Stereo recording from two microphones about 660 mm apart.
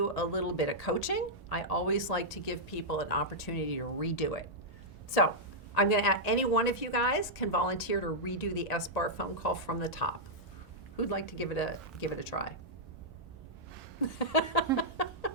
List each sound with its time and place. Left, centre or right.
0.0 s speech: left
5.7 s speech: left
14.2 s a sound: left